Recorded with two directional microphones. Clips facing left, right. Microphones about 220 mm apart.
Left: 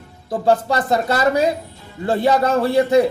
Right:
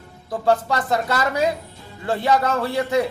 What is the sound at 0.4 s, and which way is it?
A man's voice, 35° left (ahead or behind).